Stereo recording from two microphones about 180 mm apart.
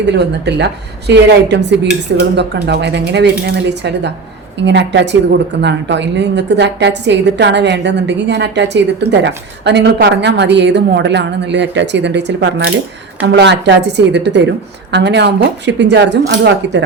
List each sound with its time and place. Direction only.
0.0 s a woman's voice: 70° right (ahead or behind); by 12.7 s 85° right
13.2 s a woman's voice: 75° right (ahead or behind)